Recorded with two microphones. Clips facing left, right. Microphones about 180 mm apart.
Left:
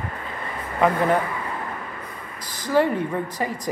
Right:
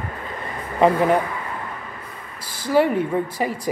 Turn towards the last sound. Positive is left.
turn(degrees=-10)  # may be behind; listen again after turning